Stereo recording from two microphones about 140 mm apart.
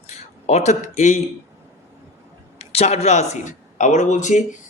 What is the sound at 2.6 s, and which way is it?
Speech, 50° left (ahead or behind).